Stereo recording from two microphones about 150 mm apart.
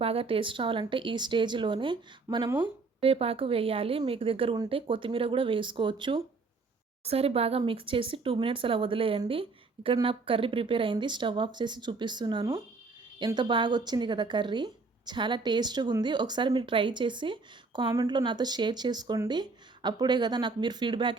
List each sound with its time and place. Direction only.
0.0 s speech: 40° right (ahead or behind)
7.0 s a woman's voice: 40° right (ahead or behind)